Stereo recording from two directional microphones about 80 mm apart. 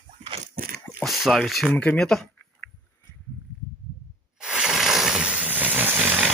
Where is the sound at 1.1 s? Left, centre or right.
Centre.